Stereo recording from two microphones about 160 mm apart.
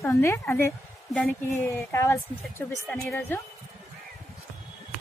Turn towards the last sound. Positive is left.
turn(degrees=10)  # may be behind; listen again after turning